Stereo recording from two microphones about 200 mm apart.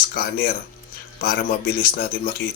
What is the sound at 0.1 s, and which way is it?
Speech, 50° left (ahead or behind).